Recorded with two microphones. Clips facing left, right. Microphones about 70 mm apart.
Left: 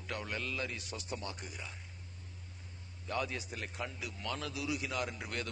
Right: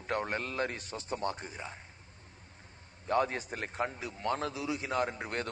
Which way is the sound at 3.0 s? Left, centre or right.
Right.